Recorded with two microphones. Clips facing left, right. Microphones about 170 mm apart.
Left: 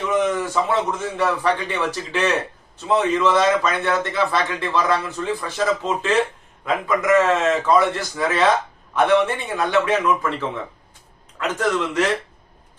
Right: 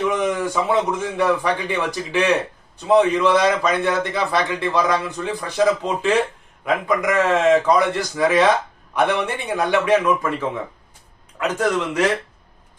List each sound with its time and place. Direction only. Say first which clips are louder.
0.1 s a man's voice: left 1 dB; 15° right (ahead or behind)